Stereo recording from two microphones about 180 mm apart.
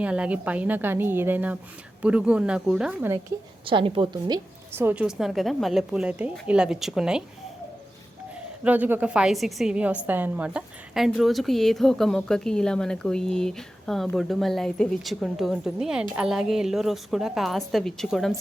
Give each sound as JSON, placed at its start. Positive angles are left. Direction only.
{"t": 0.0, "sound": "a woman's voice", "side_deg": -5}
{"t": 3.7, "sound": "a woman's voice", "side_deg": -30}
{"t": 4.7, "sound": "a woman's voice", "side_deg": -10}
{"t": 8.6, "sound": "a woman's voice", "side_deg": -10}